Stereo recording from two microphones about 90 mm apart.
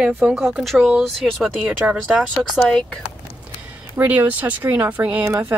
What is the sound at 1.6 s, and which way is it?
Speech, 10° right (ahead or behind).